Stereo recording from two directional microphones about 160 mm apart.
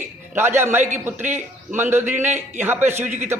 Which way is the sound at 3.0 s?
45° right (ahead or behind).